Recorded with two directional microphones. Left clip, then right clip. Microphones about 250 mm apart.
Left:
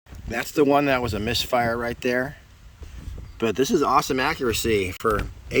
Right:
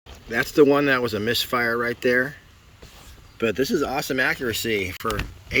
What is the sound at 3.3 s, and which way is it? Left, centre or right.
Speech, centre.